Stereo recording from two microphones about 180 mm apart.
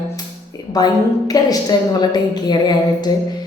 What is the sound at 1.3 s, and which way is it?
A woman's voice, 20° left (ahead or behind).